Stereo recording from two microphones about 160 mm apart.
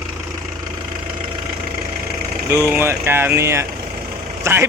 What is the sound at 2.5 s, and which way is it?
Speech, 15° right (ahead or behind).